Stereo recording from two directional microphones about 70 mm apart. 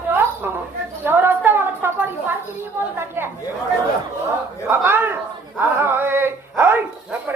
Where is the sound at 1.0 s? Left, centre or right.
Right.